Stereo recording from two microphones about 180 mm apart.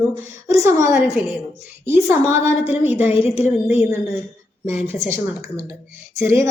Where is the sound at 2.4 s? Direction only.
35° left (ahead or behind).